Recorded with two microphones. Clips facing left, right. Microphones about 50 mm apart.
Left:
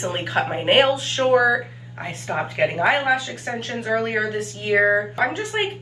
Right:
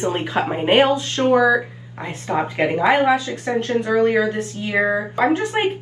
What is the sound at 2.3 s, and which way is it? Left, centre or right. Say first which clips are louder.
Speech: right 2 dB; right.